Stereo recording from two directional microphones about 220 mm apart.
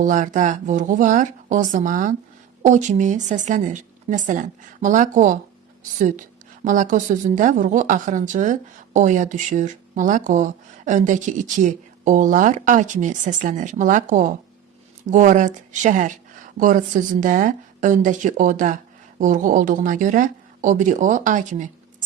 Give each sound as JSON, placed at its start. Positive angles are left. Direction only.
{"t": 0.0, "sound": "a woman's voice", "side_deg": -35}
{"t": 6.7, "sound": "a woman's voice", "side_deg": -35}